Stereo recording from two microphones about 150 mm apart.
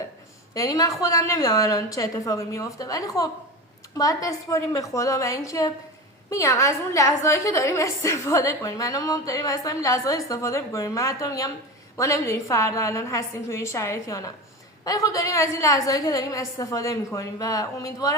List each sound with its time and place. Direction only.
0.5 s a woman's voice: 25° left (ahead or behind)